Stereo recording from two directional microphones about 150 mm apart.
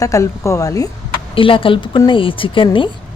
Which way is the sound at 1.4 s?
35° left (ahead or behind).